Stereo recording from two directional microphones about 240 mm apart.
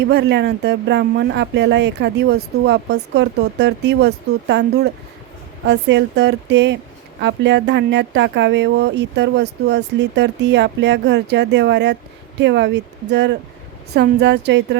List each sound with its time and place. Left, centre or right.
0.0 s speech: right